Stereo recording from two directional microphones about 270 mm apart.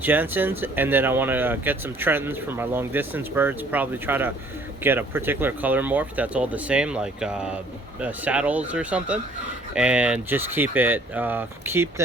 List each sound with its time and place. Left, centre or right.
0.0 s speech: centre